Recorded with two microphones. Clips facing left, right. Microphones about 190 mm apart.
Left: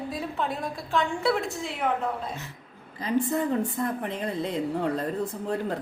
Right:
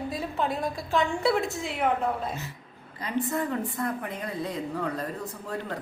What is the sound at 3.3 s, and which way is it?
A woman's voice, 25° left (ahead or behind).